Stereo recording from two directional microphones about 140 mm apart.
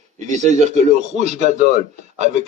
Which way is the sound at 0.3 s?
55° right (ahead or behind).